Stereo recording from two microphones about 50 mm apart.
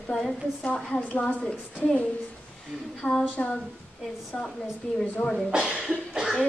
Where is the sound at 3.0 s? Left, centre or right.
Centre.